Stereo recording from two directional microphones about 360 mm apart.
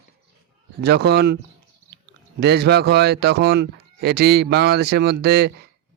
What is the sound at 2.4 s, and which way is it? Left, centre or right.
Speech, right.